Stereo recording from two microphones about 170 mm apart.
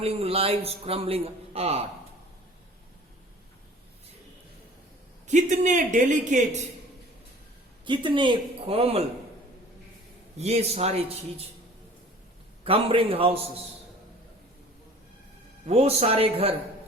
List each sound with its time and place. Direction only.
0.0 s a man's voice: 35° right (ahead or behind)
5.3 s speech: 45° right (ahead or behind)
7.9 s speech: 30° right (ahead or behind)
10.3 s a man's voice: 40° right (ahead or behind)
12.6 s a man's voice: 30° right (ahead or behind)
15.6 s a man's voice: 35° right (ahead or behind)